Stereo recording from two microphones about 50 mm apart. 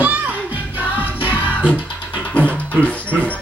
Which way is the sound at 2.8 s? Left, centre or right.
Left.